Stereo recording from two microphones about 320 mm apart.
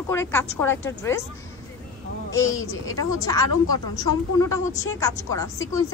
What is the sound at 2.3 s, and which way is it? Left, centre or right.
Speech, centre.